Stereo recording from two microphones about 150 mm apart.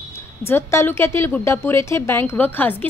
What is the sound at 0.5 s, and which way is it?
A woman's voice, 15° left (ahead or behind).